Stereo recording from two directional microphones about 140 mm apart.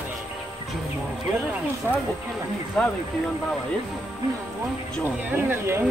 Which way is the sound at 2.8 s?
10° left (ahead or behind).